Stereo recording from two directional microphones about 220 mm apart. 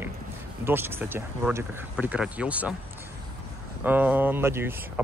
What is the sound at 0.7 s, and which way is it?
Speech, 10° right (ahead or behind).